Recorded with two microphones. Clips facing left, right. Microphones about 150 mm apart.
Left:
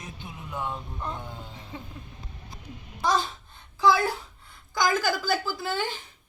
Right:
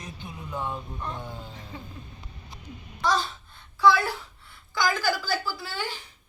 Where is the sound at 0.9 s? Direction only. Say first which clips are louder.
Even; 10° left (ahead or behind).